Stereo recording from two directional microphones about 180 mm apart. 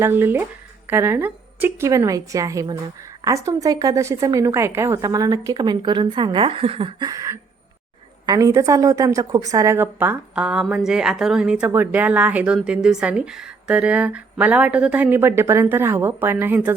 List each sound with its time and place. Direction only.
0.0 s a woman's voice: 10° right (ahead or behind)